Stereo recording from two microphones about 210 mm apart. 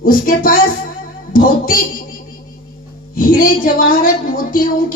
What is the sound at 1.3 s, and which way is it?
Music, 40° left (ahead or behind).